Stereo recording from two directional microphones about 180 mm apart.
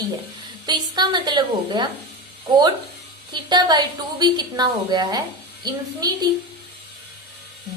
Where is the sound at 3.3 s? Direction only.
25° right (ahead or behind).